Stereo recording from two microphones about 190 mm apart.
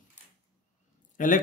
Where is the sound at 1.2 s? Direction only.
45° left (ahead or behind).